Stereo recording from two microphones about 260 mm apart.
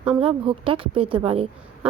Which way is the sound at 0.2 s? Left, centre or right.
Right.